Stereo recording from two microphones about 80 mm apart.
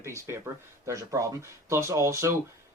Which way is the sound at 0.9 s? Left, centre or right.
Right.